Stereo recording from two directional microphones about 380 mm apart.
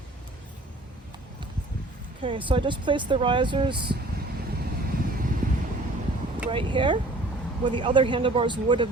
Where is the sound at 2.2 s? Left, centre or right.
Centre.